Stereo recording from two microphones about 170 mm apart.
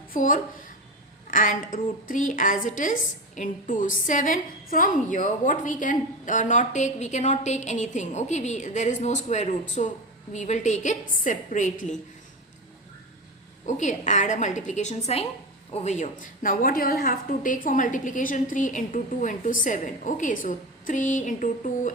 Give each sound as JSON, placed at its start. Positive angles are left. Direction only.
{"t": 0.1, "sound": "a woman's voice", "side_deg": 50}
{"t": 13.7, "sound": "a woman's voice", "side_deg": 45}